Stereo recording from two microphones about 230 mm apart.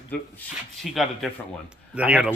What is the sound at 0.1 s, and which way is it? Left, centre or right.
A man's voice, centre.